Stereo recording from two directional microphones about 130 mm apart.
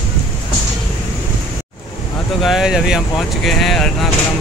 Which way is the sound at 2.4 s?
5° right (ahead or behind).